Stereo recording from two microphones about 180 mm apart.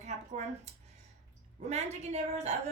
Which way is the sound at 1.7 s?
40° right (ahead or behind).